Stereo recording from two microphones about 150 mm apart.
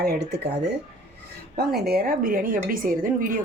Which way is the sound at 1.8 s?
90° right.